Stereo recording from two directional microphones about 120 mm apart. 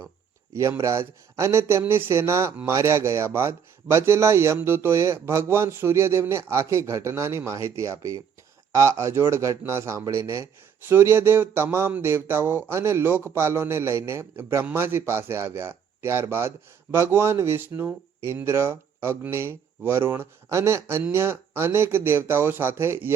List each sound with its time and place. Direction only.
0.8 s a man's voice: 25° right (ahead or behind)